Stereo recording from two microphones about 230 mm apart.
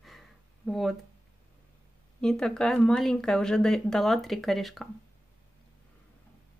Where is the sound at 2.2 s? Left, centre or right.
Centre.